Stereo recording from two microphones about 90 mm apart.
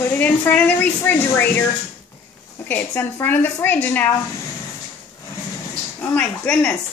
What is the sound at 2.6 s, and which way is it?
Speech, 20° left (ahead or behind).